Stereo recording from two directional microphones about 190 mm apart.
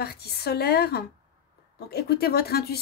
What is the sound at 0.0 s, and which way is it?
A woman's voice, 55° left (ahead or behind).